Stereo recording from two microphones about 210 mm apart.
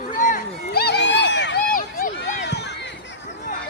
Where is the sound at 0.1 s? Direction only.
40° left (ahead or behind).